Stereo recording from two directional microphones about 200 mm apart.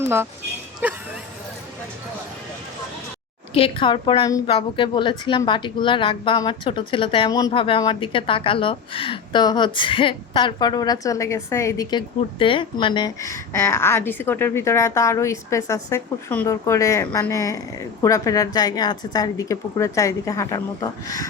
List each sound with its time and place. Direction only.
0.0 s speech: 10° right (ahead or behind)
3.5 s a woman's voice: 25° left (ahead or behind)